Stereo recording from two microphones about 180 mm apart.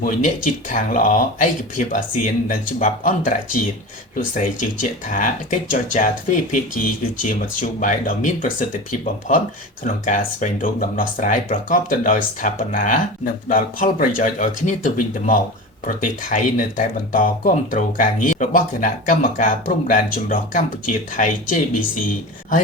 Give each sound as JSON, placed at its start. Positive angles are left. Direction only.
{"t": 0.0, "sound": "speech", "side_deg": 45}
{"t": 7.8, "sound": "speech", "side_deg": 45}